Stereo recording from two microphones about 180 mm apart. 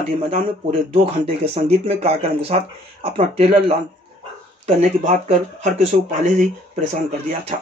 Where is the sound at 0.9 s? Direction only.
30° right (ahead or behind).